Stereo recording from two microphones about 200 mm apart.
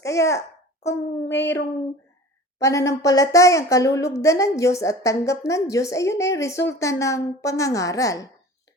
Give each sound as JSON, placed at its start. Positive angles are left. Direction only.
{"t": 0.0, "sound": "a child's voice", "side_deg": 15}
{"t": 2.6, "sound": "a woman's voice", "side_deg": 15}